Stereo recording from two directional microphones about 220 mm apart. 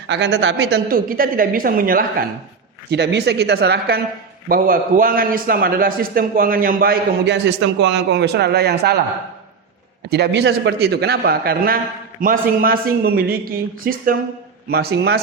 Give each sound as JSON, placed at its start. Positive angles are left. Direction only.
{"t": 0.1, "sound": "a man's voice", "side_deg": -50}
{"t": 10.0, "sound": "a man's voice", "side_deg": -50}